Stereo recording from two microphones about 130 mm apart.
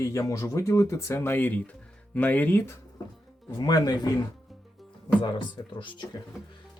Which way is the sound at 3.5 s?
30° left (ahead or behind).